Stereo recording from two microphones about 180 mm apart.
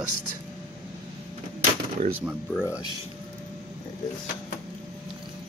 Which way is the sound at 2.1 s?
10° right (ahead or behind).